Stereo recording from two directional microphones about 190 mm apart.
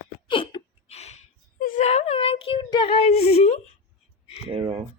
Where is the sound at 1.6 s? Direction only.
45° left (ahead or behind).